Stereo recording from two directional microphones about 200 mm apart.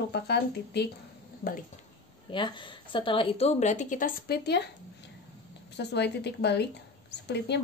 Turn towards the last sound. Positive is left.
turn(degrees=60)  # may be behind; listen again after turning